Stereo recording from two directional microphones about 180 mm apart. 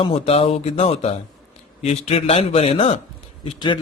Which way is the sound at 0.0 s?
35° left (ahead or behind).